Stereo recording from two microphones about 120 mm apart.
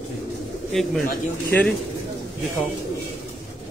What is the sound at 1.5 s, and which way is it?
Speech, 10° left (ahead or behind).